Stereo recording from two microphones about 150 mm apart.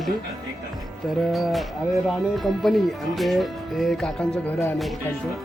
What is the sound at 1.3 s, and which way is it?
Speech, centre (ahead or behind).